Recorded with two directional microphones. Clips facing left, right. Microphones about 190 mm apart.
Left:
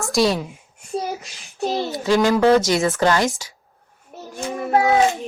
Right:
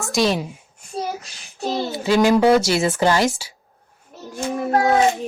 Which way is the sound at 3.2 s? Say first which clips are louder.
Right 1 dB; 25° right (ahead or behind).